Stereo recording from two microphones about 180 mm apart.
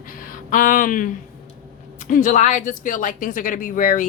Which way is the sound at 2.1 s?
45° left (ahead or behind).